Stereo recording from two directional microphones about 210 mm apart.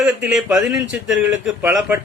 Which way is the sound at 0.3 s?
5° right (ahead or behind).